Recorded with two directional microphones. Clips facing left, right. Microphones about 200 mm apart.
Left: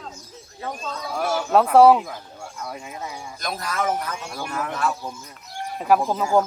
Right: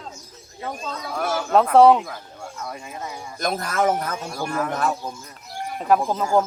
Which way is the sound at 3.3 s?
50° right (ahead or behind).